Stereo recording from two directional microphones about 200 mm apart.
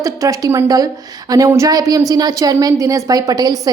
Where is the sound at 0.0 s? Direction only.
15° right (ahead or behind).